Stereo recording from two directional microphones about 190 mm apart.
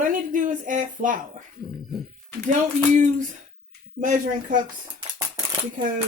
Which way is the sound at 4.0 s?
45° right (ahead or behind).